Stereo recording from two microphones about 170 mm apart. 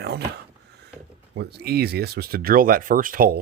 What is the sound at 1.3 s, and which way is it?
Speech, 75° right (ahead or behind).